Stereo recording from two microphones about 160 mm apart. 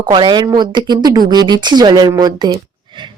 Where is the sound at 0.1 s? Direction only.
30° right (ahead or behind).